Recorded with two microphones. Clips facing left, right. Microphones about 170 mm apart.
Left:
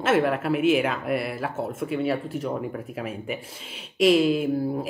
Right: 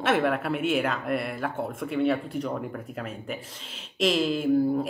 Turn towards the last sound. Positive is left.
turn(degrees=5)  # may be behind; listen again after turning